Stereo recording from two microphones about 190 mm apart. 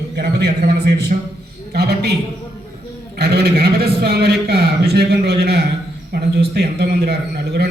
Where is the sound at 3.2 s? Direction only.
60° right (ahead or behind).